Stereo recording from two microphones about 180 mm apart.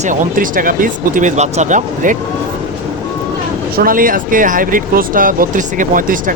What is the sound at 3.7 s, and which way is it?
Speech, 50° right (ahead or behind).